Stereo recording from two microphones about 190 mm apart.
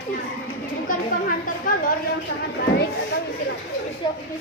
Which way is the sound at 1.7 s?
45° left (ahead or behind).